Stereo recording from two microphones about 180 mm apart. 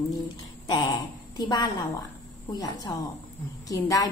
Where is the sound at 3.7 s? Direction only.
20° left (ahead or behind).